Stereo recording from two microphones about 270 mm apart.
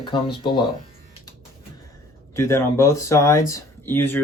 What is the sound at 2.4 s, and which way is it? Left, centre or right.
Speech, centre.